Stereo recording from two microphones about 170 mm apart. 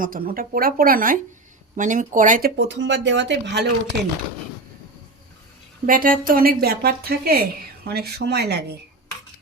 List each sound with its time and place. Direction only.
0.0 s a woman's voice: 55° right (ahead or behind)
2.6 s speech: 90° right
5.8 s a woman's voice: 55° right (ahead or behind); by 8.8 s 75° right (ahead or behind)